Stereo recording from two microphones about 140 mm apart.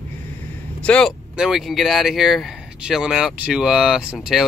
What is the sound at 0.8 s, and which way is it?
Speech, 10° left (ahead or behind).